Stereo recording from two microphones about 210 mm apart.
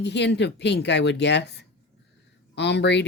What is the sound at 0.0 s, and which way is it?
Speech, 55° left (ahead or behind).